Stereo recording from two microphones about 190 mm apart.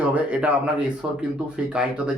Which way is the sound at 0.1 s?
5° right (ahead or behind).